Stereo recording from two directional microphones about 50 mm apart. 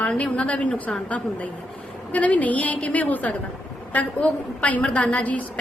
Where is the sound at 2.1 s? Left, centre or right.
Left.